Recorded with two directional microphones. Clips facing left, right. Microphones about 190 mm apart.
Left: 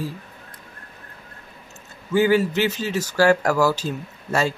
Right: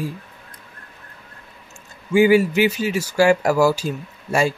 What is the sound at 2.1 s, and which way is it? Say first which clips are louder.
Speech: right 4 dB; 10° right (ahead or behind).